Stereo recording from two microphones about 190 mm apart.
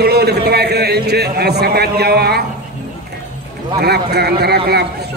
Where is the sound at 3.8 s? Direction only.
55° right (ahead or behind).